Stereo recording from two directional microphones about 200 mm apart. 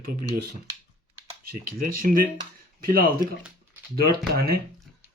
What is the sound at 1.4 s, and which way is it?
Speech, 45° right (ahead or behind).